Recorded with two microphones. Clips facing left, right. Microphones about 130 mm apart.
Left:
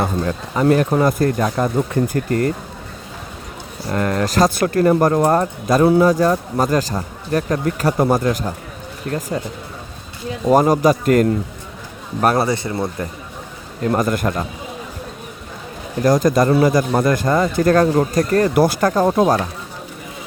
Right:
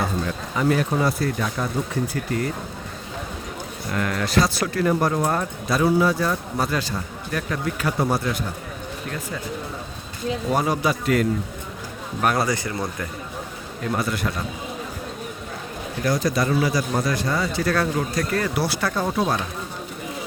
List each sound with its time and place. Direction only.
0.0 s speech: 45° left (ahead or behind)
3.8 s speech: 40° left (ahead or behind)
10.5 s speech: 45° left (ahead or behind)
12.2 s speech: 35° left (ahead or behind)
13.8 s speech: 45° left (ahead or behind)
16.0 s speech: 45° left (ahead or behind)